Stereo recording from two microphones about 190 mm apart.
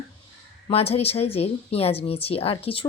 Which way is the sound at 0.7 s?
30° left (ahead or behind).